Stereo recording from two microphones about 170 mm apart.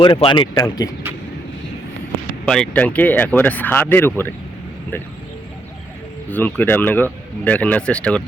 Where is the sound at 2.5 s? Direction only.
5° left (ahead or behind).